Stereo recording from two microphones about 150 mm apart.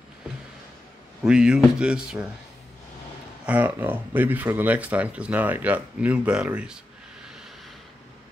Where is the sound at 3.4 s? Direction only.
10° right (ahead or behind).